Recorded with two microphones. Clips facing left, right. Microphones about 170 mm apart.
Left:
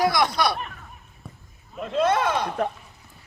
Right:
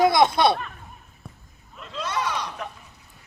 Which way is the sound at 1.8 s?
55° left (ahead or behind).